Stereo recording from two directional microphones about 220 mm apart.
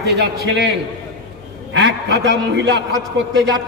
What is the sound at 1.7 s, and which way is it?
A man's voice, 50° right (ahead or behind).